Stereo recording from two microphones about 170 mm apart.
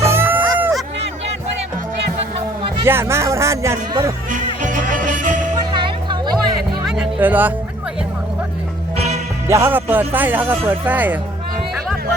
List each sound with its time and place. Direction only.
0.0 s music: 15° right (ahead or behind)
2.8 s speech: 15° right (ahead or behind)
4.3 s music: 50° right (ahead or behind)
5.5 s music: 25° right (ahead or behind)
6.8 s music: 5° right (ahead or behind)
9.0 s music: 40° right (ahead or behind)
9.5 s speech: 15° right (ahead or behind)